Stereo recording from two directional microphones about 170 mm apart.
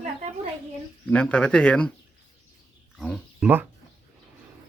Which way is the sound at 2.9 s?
Centre (ahead or behind).